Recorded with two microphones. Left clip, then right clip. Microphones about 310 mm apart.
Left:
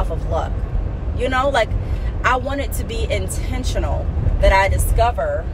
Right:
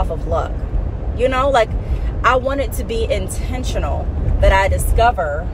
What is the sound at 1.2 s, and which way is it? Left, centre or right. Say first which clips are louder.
Speech: right 3 dB; centre.